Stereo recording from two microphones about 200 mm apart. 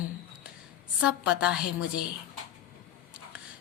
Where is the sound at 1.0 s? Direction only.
5° right (ahead or behind).